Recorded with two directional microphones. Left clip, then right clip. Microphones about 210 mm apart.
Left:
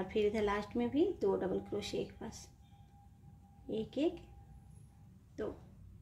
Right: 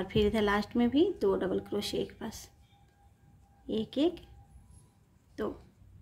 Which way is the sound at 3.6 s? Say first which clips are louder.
Right 5 dB; 25° right (ahead or behind).